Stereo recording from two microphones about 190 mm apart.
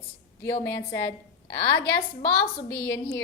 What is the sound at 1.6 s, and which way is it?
Speech, 25° left (ahead or behind).